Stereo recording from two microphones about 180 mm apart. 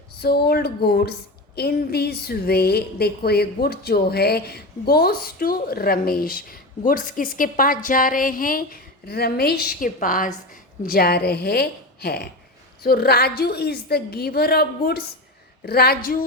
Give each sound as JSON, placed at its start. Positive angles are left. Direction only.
{"t": 0.2, "sound": "a woman's voice", "side_deg": 60}